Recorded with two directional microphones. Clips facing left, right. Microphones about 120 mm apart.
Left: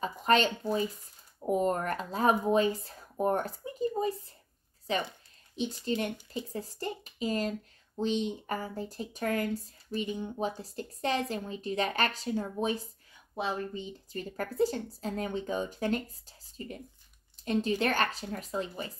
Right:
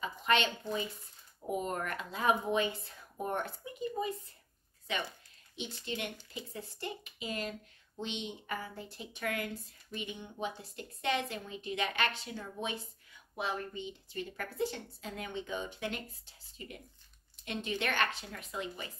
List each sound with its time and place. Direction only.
0.0 s speech: 40° left (ahead or behind)